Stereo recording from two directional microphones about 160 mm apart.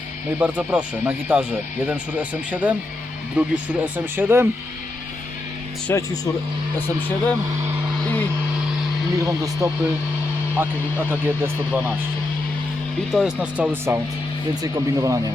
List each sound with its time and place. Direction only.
0.3 s speech: 10° right (ahead or behind)
5.9 s speech: 15° left (ahead or behind)
8.0 s speech: 10° left (ahead or behind)
9.1 s speech: 20° right (ahead or behind)
13.1 s speech: centre (ahead or behind); by 15.2 s 20° right (ahead or behind)